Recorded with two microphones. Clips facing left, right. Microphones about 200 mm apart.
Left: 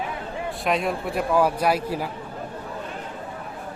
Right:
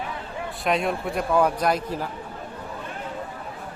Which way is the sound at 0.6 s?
Centre (ahead or behind).